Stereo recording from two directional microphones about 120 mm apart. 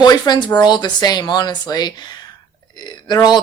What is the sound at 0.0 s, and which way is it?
Speech, 35° left (ahead or behind).